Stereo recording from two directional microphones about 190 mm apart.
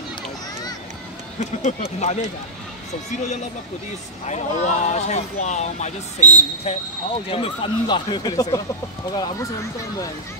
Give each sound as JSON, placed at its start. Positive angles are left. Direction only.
{"t": 1.6, "sound": "speech", "side_deg": 35}
{"t": 4.3, "sound": "speech", "side_deg": 35}